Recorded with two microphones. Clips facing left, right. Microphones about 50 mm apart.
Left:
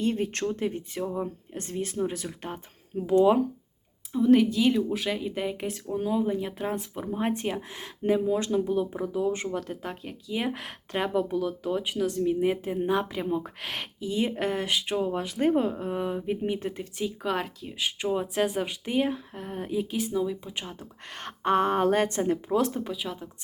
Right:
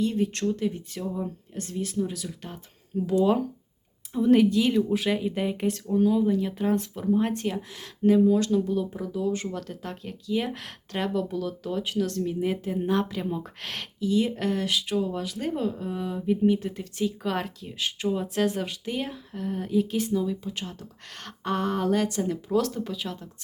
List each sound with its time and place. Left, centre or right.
0.0 s speech: left
4.1 s speech: centre; by 9.6 s left
9.6 s speech: centre
17.0 s speech: centre